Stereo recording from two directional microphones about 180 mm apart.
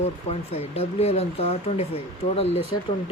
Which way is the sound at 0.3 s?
35° left (ahead or behind).